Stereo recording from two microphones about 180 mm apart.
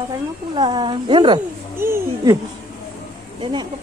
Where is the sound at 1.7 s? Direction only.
15° right (ahead or behind).